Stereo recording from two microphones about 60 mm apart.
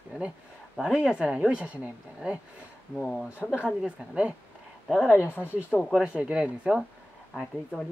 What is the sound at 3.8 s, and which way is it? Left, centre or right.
Speech, centre.